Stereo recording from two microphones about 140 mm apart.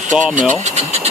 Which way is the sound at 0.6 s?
50° right (ahead or behind).